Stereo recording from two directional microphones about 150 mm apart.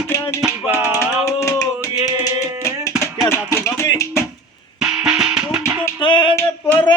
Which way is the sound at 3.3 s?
15° left (ahead or behind).